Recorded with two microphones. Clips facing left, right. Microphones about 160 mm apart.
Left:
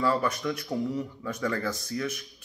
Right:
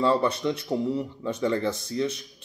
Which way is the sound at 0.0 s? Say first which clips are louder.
Right 4 dB; 25° right (ahead or behind).